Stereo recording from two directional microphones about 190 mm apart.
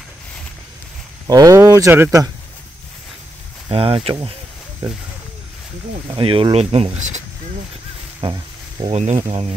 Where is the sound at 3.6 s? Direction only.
30° right (ahead or behind).